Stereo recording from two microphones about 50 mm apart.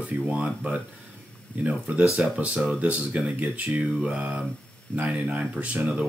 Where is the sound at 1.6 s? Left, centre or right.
Right.